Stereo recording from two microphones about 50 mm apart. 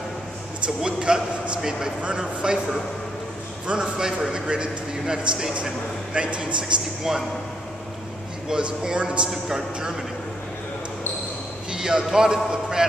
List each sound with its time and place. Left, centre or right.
0.7 s a man's voice: centre
7.0 s a man's voice: centre
8.5 s a man's voice: centre
11.7 s a man's voice: centre